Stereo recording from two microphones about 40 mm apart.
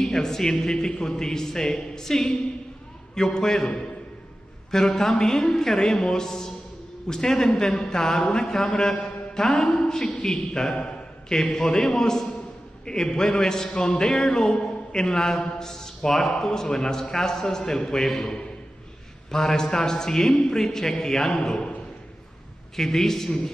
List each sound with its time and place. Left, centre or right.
0.0 s a man's voice: centre
22.8 s a man's voice: centre